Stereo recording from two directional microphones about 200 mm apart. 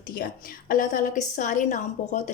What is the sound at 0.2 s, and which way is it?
Speech, 45° left (ahead or behind).